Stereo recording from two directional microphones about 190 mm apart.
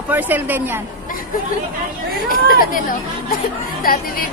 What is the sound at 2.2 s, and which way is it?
Speech, 50° left (ahead or behind).